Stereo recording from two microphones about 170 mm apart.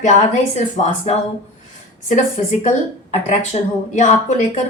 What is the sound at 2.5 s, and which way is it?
A woman's voice, 45° left (ahead or behind).